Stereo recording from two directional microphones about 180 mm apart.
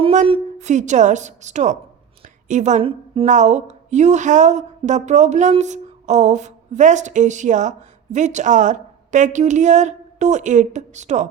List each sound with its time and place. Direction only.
0.0 s a woman's voice: 35° right (ahead or behind)